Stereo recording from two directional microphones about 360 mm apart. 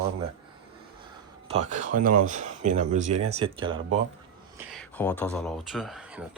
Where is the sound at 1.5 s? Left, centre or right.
Centre.